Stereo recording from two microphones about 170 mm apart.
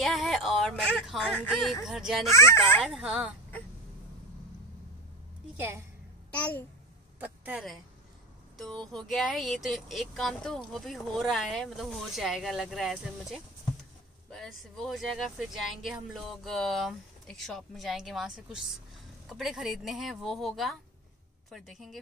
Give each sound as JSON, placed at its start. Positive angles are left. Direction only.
{"t": 0.0, "sound": "speech", "side_deg": 0}
{"t": 2.3, "sound": "speech", "side_deg": 15}
{"t": 2.8, "sound": "speech", "side_deg": -5}
{"t": 7.2, "sound": "speech", "side_deg": -10}